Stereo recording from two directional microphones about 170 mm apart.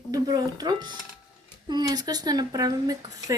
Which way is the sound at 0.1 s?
20° right (ahead or behind).